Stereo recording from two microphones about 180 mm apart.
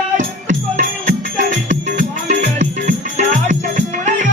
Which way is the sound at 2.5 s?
40° right (ahead or behind).